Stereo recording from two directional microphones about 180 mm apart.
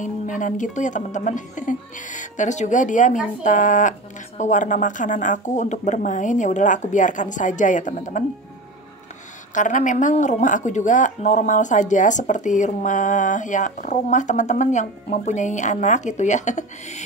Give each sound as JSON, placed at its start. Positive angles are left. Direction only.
{"t": 0.0, "sound": "a woman's voice", "side_deg": 45}
{"t": 9.5, "sound": "a woman's voice", "side_deg": 45}